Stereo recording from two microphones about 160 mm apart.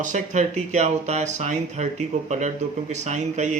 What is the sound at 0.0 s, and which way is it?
Speech, 50° right (ahead or behind).